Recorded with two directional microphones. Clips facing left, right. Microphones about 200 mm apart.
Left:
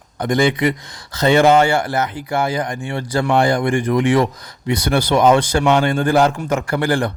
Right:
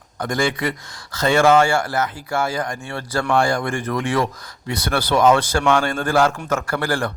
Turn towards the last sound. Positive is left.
turn(degrees=20)  # may be behind; listen again after turning